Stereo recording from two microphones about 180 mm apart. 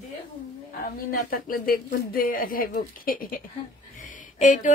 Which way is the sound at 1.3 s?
55° left (ahead or behind).